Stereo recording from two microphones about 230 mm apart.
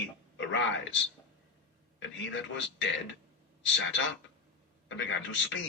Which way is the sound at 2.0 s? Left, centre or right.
Left.